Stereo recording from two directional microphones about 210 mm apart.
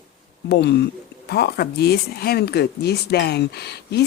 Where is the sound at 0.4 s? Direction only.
50° left (ahead or behind).